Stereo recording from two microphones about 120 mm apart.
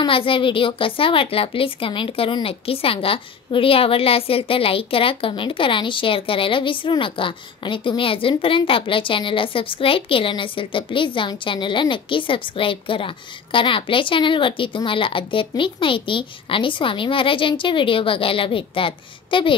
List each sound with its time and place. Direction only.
0.0 s a woman's voice: 45° left (ahead or behind)